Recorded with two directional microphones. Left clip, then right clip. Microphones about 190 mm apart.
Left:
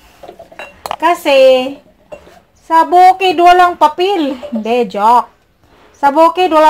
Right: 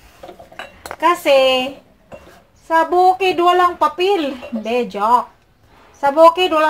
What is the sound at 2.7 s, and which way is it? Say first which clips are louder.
Speech: left 6 dB; 30° left (ahead or behind).